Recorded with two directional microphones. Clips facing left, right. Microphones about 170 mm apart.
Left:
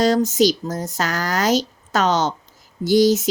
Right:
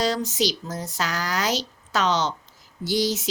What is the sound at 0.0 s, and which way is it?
Speech, 45° left (ahead or behind).